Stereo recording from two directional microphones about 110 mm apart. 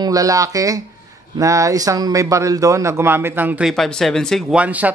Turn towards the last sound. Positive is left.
turn(degrees=-15)  # may be behind; listen again after turning